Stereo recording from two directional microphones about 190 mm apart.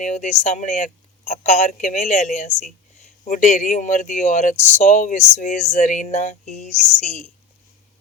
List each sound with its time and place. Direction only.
0.0 s speech: 40° left (ahead or behind)